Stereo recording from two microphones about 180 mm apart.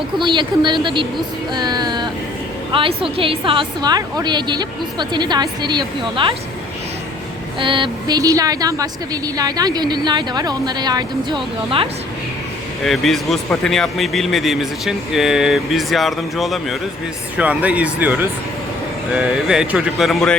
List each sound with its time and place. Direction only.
0.2 s a woman's voice: 25° right (ahead or behind)
1.5 s a sound: 25° right (ahead or behind)
2.7 s a woman's voice: 30° right (ahead or behind)
7.6 s a woman's voice: 25° right (ahead or behind)
12.8 s speech: centre (ahead or behind)